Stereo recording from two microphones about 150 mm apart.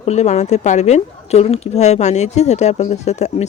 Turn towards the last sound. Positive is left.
turn(degrees=50)  # may be behind; listen again after turning